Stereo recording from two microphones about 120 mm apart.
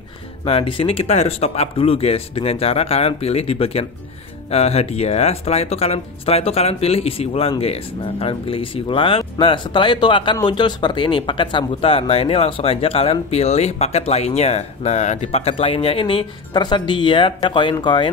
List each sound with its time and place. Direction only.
0.5 s speech: 50° left (ahead or behind)